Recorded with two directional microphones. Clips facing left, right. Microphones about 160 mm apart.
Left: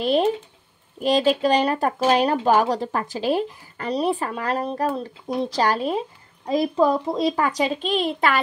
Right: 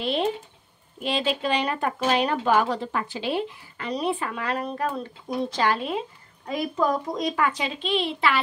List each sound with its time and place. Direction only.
0.0 s speech: 40° left (ahead or behind)